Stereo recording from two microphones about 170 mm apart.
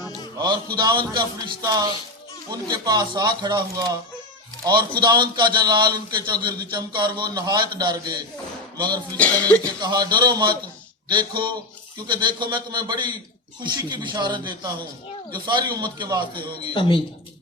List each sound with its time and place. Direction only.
0.3 s a man's voice: 25° right (ahead or behind)
9.1 s music: 10° left (ahead or behind)
9.8 s a man's voice: 25° right (ahead or behind)